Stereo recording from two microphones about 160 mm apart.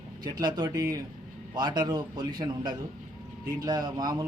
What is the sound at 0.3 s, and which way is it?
Speech, 25° right (ahead or behind).